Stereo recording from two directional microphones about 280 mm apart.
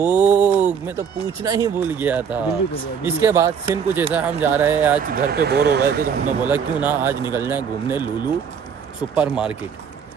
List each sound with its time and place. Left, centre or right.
0.0 s speech: centre
5.0 s speech: right
6.4 s speech: centre
9.1 s speech: centre